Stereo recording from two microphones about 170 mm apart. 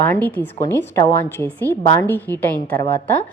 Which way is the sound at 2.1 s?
10° left (ahead or behind).